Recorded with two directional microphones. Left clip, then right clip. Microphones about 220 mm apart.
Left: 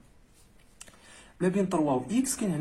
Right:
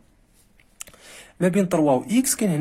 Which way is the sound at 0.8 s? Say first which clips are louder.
Right 9 dB; 50° right (ahead or behind).